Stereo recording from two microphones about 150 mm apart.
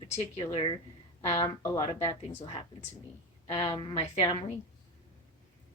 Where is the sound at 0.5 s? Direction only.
35° left (ahead or behind).